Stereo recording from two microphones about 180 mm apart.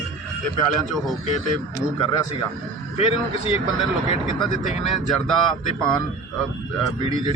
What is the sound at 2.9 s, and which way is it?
Speech, 35° left (ahead or behind).